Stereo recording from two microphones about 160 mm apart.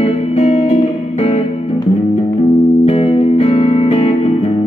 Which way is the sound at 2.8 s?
40° left (ahead or behind).